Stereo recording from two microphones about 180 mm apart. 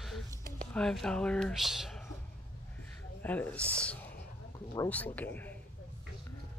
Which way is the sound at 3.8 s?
10° left (ahead or behind).